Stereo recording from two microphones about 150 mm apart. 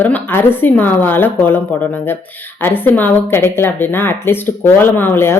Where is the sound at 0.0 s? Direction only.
15° left (ahead or behind).